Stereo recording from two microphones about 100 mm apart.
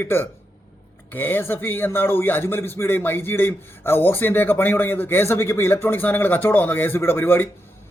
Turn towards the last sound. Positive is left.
turn(degrees=20)  # may be behind; listen again after turning